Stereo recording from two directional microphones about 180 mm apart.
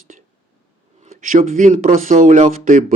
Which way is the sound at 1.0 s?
50° right (ahead or behind).